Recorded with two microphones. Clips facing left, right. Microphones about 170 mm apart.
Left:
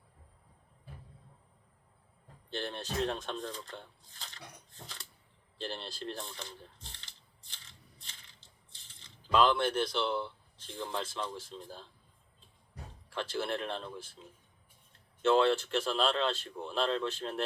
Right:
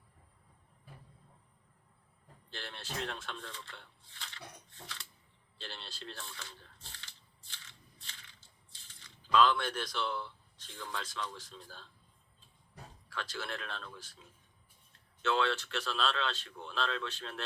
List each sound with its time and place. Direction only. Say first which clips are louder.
2.6 s speech: left 7 dB; 35° left (ahead or behind)
9.0 s speech: left 1 dB; 30° left (ahead or behind)
11.3 s speech: left 6 dB; 10° left (ahead or behind)
13.1 s speech: left 7 dB; 30° left (ahead or behind)
15.3 s speech: left 6 dB; 35° left (ahead or behind)